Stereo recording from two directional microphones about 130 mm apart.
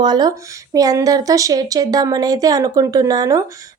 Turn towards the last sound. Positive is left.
turn(degrees=-30)  # may be behind; listen again after turning